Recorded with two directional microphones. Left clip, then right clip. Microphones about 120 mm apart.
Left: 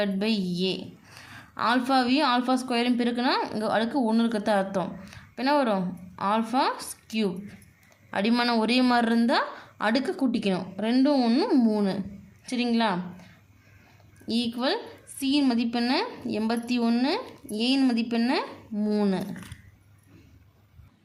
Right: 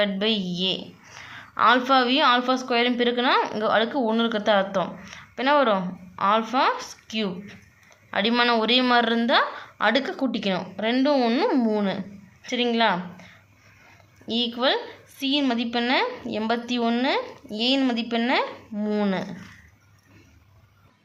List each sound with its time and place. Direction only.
0.0 s a woman's voice: 35° left (ahead or behind)
11.4 s a woman's voice: 25° left (ahead or behind)
15.2 s a woman's voice: 40° left (ahead or behind); by 19.2 s 20° left (ahead or behind)